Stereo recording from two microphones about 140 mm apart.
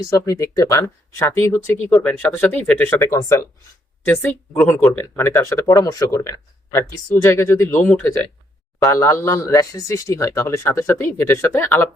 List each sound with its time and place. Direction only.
0.0 s speech: 25° left (ahead or behind)
4.0 s speech: 10° left (ahead or behind)
4.7 s speech: 15° left (ahead or behind)